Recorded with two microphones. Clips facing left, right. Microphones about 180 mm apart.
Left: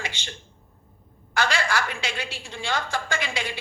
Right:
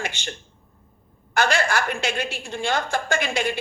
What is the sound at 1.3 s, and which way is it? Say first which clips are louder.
A woman's voice: right 3 dB; 50° right (ahead or behind).